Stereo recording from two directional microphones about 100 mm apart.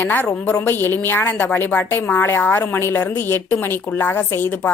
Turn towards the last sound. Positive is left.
turn(degrees=20)  # may be behind; listen again after turning